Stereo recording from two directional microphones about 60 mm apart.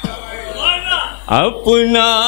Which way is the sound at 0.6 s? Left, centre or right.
Left.